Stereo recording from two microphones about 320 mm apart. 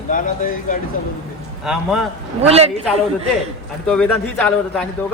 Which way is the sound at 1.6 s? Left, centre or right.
Centre.